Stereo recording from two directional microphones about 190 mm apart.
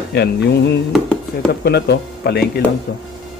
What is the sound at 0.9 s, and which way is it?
Speech, 5° left (ahead or behind).